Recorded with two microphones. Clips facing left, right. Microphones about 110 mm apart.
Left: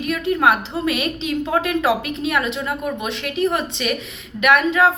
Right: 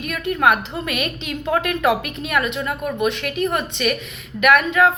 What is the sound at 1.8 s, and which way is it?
A woman's voice, 30° left (ahead or behind).